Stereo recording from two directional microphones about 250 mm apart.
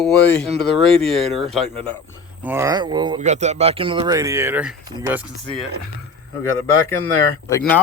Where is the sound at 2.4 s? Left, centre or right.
Centre.